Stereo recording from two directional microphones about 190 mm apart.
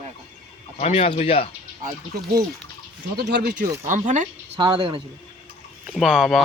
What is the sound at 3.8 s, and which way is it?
Speech, 40° right (ahead or behind).